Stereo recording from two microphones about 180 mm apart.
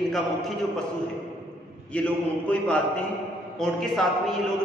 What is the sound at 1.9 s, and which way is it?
A man's voice, 5° left (ahead or behind).